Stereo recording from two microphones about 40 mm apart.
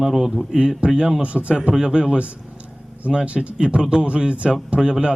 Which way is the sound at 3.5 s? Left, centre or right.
Right.